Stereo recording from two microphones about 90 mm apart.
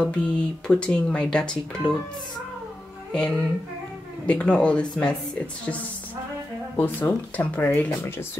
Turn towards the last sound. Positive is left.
turn(degrees=15)  # may be behind; listen again after turning